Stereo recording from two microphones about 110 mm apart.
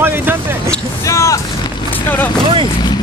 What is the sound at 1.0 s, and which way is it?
Speech, 30° left (ahead or behind).